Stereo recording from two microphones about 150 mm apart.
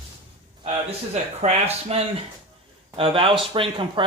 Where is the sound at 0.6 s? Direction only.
45° right (ahead or behind).